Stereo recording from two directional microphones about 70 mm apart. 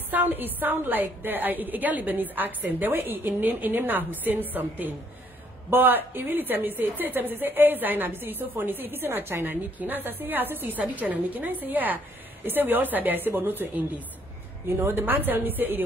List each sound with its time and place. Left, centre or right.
0.1 s a woman's voice: right